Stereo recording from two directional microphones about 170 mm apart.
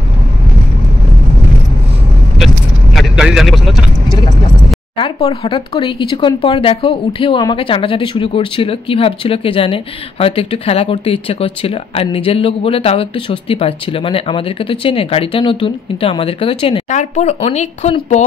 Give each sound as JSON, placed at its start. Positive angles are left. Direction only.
{"t": 2.3, "sound": "vehicle", "side_deg": 0}
{"t": 4.9, "sound": "speech", "side_deg": 30}
{"t": 16.9, "sound": "speech", "side_deg": 45}